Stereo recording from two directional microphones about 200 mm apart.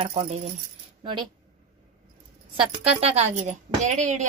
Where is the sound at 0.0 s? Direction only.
30° right (ahead or behind).